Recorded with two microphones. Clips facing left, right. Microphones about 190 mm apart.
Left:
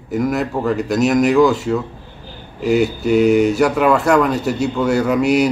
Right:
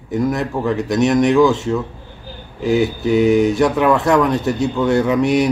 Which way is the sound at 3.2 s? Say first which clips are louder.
Even; 65° left (ahead or behind).